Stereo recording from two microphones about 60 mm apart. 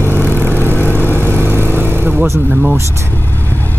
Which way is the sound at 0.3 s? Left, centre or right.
Left.